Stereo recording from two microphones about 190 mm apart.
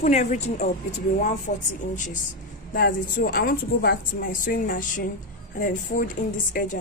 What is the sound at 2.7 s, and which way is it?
A woman's voice, 45° left (ahead or behind).